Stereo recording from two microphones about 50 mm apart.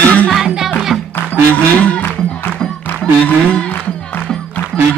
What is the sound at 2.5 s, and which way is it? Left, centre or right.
Music, centre.